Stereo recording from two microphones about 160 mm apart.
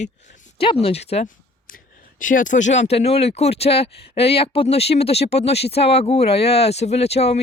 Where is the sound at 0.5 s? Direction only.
35° left (ahead or behind).